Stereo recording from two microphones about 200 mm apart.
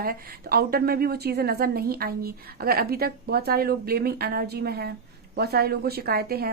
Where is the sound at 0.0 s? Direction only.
50° right (ahead or behind).